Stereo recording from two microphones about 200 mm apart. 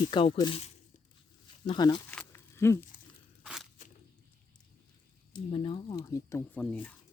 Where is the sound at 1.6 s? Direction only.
20° left (ahead or behind).